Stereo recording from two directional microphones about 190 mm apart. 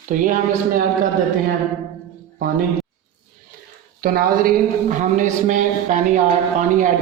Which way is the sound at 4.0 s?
50° right (ahead or behind).